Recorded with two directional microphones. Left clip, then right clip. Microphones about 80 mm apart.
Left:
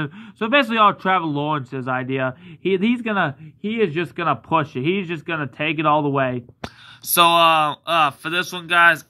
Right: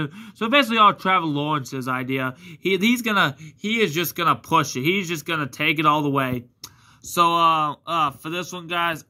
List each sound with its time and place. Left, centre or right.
0.0 s speech: right
7.1 s speech: centre